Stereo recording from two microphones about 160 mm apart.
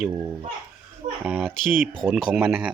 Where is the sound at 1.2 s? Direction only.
10° right (ahead or behind).